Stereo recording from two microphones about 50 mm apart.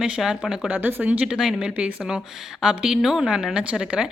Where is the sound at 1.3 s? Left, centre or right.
Centre.